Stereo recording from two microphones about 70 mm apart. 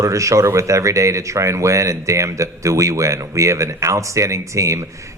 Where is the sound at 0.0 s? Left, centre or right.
Right.